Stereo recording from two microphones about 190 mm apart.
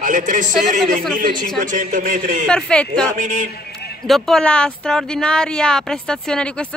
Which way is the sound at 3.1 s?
40° right (ahead or behind).